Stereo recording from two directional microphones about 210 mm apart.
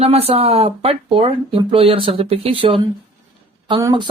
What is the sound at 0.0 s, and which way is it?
Speech, 30° right (ahead or behind).